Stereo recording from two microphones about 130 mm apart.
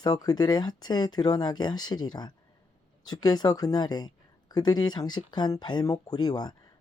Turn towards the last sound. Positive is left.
turn(degrees=35)  # may be behind; listen again after turning